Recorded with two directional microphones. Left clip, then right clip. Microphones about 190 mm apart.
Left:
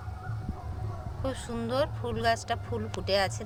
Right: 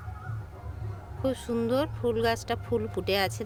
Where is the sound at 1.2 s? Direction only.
65° right (ahead or behind).